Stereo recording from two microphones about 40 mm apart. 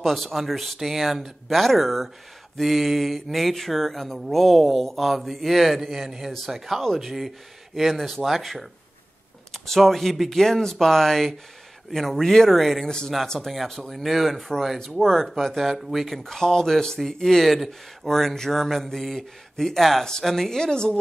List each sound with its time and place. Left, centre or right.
0.0 s speech: centre
12.8 s speech: centre
13.5 s speech: centre
15.0 s speech: centre